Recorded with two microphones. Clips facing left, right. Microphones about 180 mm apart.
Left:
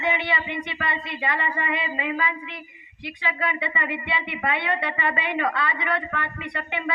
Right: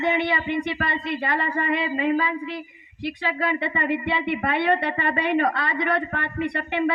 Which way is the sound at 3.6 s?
45° right (ahead or behind).